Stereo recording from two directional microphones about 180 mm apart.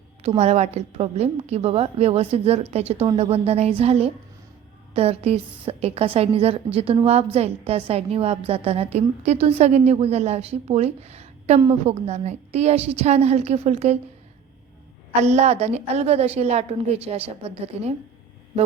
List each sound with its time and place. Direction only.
0.2 s a woman's voice: 35° right (ahead or behind)
15.2 s a woman's voice: 40° right (ahead or behind)